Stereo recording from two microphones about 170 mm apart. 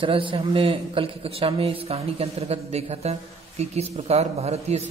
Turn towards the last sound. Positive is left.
turn(degrees=-40)  # may be behind; listen again after turning